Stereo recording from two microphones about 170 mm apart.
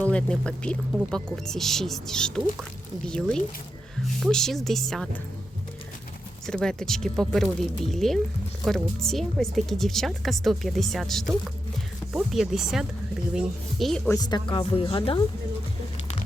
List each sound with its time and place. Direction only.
0.0 s speech: 5° left (ahead or behind)
6.4 s speech: 5° left (ahead or behind)
14.1 s speech: 25° left (ahead or behind)